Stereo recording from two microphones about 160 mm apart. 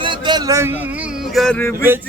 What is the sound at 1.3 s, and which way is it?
Speech, centre (ahead or behind).